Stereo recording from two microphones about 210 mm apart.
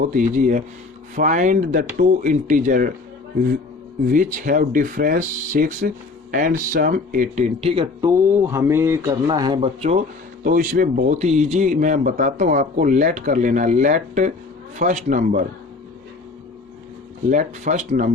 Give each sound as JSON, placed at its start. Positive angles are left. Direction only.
{"t": 0.0, "sound": "a man's voice", "side_deg": -40}
{"t": 4.1, "sound": "a man's voice", "side_deg": -40}
{"t": 8.0, "sound": "a man's voice", "side_deg": -15}
{"t": 10.4, "sound": "a man's voice", "side_deg": -40}
{"t": 17.2, "sound": "a man's voice", "side_deg": -35}